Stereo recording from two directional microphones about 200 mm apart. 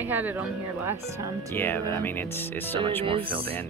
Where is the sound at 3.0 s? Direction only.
25° right (ahead or behind).